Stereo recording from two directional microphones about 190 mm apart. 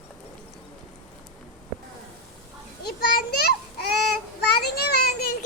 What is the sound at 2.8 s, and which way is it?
Children playing, 55° left (ahead or behind).